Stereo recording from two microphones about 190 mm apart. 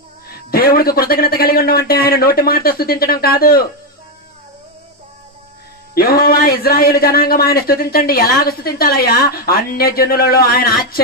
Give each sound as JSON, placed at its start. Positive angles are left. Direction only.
{"t": 0.3, "sound": "speech", "side_deg": 55}
{"t": 5.9, "sound": "speech", "side_deg": 55}